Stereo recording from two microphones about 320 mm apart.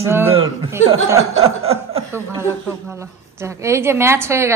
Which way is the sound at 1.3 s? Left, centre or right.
Centre.